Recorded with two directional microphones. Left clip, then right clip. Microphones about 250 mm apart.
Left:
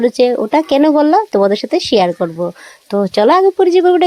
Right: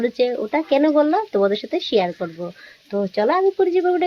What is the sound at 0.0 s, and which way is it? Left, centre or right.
Speech, left.